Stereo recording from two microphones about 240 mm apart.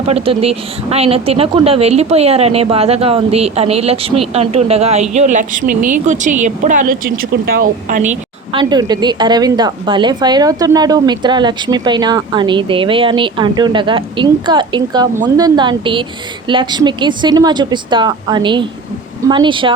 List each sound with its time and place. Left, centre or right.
0.1 s a woman's voice: right
8.7 s a woman's voice: centre